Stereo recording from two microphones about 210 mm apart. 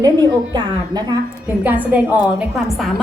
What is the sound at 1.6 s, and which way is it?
Speech, 5° right (ahead or behind).